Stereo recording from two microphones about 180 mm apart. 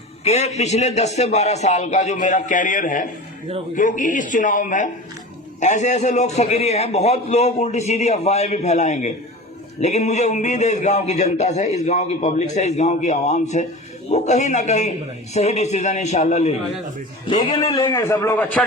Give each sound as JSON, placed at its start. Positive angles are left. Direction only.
{"t": 0.3, "sound": "a man's voice", "side_deg": 40}
{"t": 17.2, "sound": "speech", "side_deg": 30}
{"t": 17.8, "sound": "a man's voice", "side_deg": 15}